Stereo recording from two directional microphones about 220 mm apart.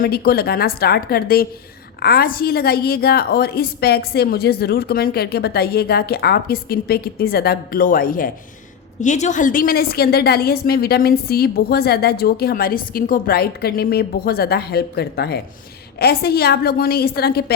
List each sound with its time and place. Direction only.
0.0 s a woman's voice: 45° left (ahead or behind)